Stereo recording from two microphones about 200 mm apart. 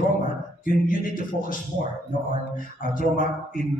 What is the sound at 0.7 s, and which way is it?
A man's voice, 45° left (ahead or behind).